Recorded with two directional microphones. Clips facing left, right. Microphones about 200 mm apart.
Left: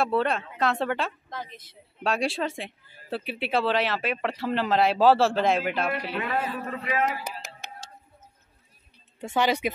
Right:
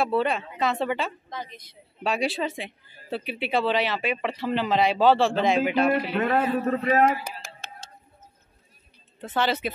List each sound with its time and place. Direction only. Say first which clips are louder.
0.0 s a woman's voice: right 1 dB; centre (ahead or behind)
6.1 s a man's voice: right 6 dB; 45° right (ahead or behind)
7.2 s a sound: left 1 dB; 20° left (ahead or behind)
9.2 s speech: left 1 dB; 15° left (ahead or behind)